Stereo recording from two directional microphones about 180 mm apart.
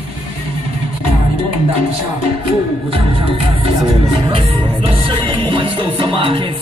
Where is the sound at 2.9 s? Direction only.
30° right (ahead or behind).